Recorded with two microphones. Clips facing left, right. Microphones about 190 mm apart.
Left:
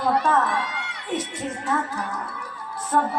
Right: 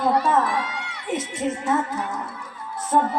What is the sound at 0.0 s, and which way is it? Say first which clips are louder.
A woman's voice: right 1 dB; 25° right (ahead or behind).